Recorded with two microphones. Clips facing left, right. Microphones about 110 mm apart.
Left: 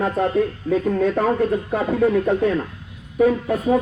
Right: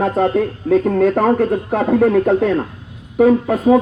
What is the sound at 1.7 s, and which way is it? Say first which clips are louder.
Speech: right 7 dB; 90° right.